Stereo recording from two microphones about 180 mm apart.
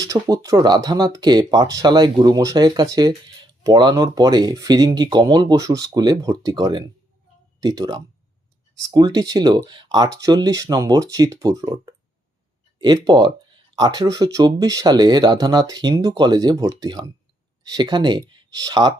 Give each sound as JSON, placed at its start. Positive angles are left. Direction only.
{"t": 0.0, "sound": "speech", "side_deg": -20}